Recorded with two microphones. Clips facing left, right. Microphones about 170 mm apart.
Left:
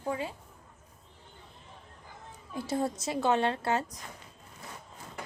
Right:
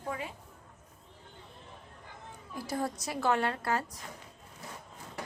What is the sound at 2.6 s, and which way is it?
A woman's voice, 25° left (ahead or behind).